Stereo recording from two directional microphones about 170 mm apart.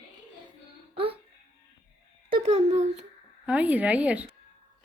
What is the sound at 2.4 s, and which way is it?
Speech, 40° right (ahead or behind).